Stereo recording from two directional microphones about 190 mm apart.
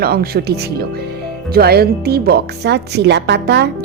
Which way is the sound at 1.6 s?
55° right (ahead or behind).